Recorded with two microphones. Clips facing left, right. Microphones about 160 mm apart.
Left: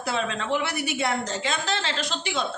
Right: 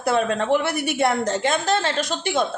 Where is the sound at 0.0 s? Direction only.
50° right (ahead or behind).